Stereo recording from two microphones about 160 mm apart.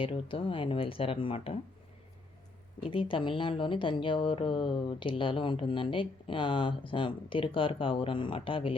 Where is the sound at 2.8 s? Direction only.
30° left (ahead or behind).